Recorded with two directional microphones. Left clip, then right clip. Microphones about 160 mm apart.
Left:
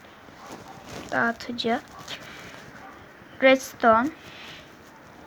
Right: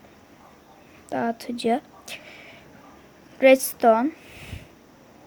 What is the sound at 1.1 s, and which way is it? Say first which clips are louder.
Zipper: left 2 dB; 35° right (ahead or behind).